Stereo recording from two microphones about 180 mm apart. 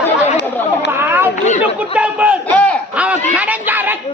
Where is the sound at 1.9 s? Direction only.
5° right (ahead or behind).